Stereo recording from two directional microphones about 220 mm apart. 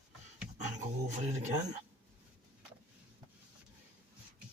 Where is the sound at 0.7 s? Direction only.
35° right (ahead or behind).